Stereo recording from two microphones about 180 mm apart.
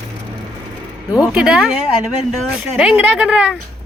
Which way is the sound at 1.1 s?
5° right (ahead or behind).